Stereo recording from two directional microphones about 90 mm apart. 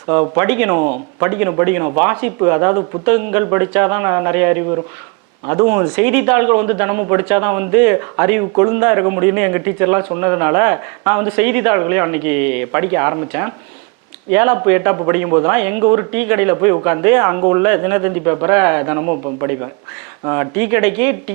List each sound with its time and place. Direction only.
0.1 s a man's voice: 20° right (ahead or behind)
15.8 s a man's voice: 25° right (ahead or behind)